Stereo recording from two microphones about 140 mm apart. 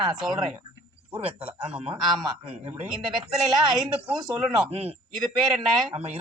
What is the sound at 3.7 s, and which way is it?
Speech, 5° right (ahead or behind).